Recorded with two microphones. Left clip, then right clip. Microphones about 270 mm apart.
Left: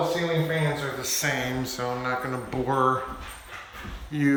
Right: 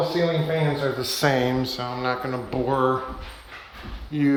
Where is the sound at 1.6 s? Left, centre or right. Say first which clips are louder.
Right 2 dB; centre.